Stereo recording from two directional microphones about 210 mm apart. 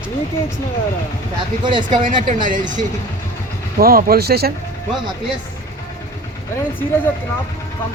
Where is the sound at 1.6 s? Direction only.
25° right (ahead or behind).